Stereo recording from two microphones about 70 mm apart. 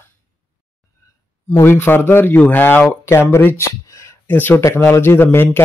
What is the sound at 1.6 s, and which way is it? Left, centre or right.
Speech, left.